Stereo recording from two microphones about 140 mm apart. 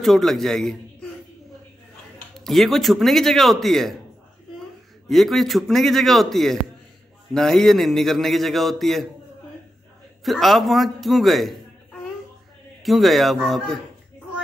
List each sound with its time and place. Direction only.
0.0 s a man's voice: centre (ahead or behind)
2.3 s a man's voice: centre (ahead or behind)
5.0 s a man's voice: centre (ahead or behind)
10.2 s a man's voice: centre (ahead or behind)
12.8 s a man's voice: centre (ahead or behind)